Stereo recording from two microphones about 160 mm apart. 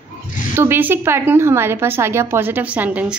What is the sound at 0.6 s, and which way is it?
A woman's voice, 15° right (ahead or behind).